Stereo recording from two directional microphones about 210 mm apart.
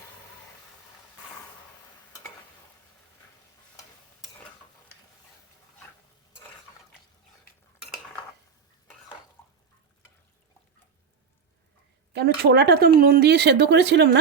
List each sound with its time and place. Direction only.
9.4 s bathtub: 10° left (ahead or behind)
12.1 s speech: 50° right (ahead or behind)